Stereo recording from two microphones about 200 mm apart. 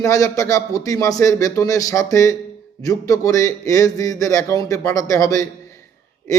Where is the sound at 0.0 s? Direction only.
15° left (ahead or behind).